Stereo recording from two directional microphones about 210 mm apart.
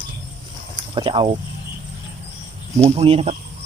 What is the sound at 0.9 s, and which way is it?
Speech, 25° right (ahead or behind).